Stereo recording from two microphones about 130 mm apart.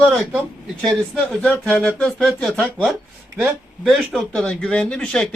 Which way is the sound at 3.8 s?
5° right (ahead or behind).